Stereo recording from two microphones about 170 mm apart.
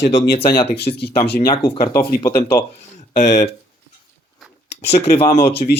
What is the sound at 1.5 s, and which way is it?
Speech, 30° left (ahead or behind).